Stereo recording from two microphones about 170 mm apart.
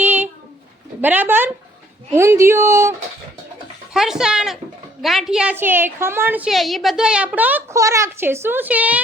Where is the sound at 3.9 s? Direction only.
5° right (ahead or behind).